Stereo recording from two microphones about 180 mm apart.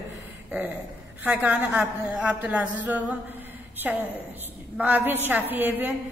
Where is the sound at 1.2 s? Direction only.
10° right (ahead or behind).